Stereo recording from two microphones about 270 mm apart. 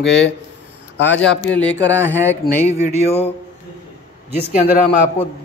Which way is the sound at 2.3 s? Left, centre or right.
Centre.